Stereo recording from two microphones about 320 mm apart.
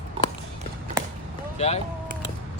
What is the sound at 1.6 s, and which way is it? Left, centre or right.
Speech, centre.